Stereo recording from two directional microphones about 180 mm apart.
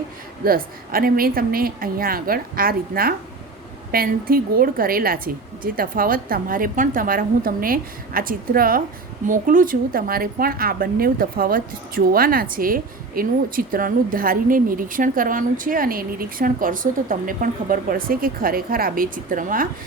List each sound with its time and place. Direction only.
0.4 s a woman's voice: 55° right (ahead or behind)